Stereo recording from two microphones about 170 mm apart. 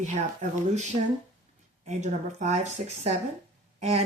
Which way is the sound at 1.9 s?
40° right (ahead or behind).